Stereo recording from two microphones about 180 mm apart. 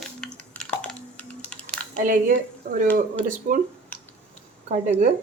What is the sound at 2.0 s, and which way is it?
Speech, 50° right (ahead or behind).